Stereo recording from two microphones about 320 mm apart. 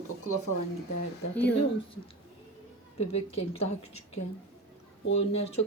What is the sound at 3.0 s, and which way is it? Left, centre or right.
Speech, centre.